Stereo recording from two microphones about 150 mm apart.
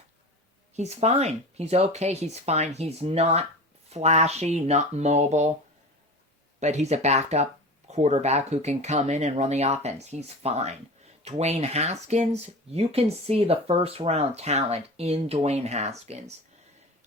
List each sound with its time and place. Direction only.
0.8 s speech: 45° right (ahead or behind)
6.6 s speech: 50° right (ahead or behind)